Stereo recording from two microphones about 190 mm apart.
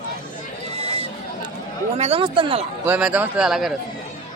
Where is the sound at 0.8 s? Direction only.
30° right (ahead or behind).